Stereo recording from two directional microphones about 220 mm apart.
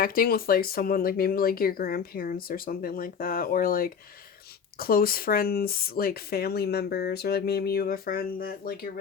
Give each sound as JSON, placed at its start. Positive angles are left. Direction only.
{"t": 0.0, "sound": "speech", "side_deg": 40}